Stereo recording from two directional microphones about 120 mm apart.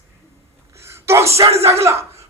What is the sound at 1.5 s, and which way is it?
Speech, 55° right (ahead or behind).